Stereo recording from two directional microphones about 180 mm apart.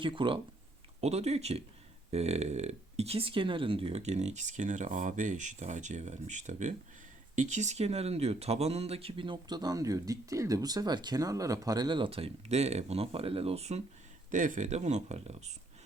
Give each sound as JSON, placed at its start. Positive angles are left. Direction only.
{"t": 0.0, "sound": "speech", "side_deg": -30}